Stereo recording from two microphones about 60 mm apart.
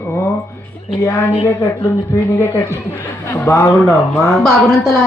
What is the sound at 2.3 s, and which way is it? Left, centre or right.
A man's voice, left.